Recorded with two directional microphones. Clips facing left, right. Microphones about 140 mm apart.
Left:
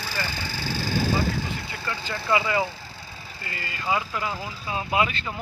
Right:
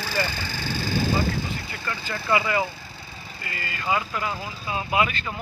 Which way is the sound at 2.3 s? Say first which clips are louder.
Even; 20° left (ahead or behind).